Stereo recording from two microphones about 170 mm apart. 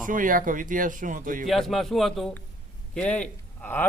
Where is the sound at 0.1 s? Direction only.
50° right (ahead or behind).